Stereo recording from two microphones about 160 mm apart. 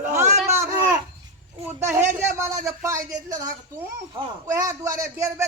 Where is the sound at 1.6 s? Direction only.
15° right (ahead or behind).